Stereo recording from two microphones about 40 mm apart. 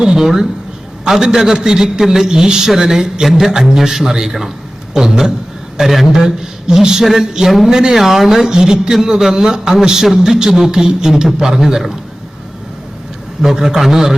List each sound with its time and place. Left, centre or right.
0.0 s a man's voice: centre
5.8 s a man's voice: centre
6.1 s a man's voice: centre
7.7 s speech: centre
7.9 s a man's voice: centre
13.4 s a man's voice: centre